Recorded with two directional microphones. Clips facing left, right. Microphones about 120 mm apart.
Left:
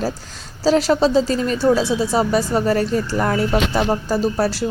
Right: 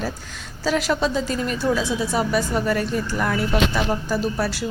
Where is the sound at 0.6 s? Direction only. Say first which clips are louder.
Left 6 dB; 35° left (ahead or behind).